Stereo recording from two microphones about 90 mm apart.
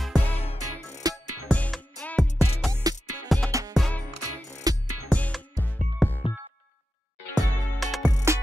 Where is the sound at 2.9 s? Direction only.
45° right (ahead or behind).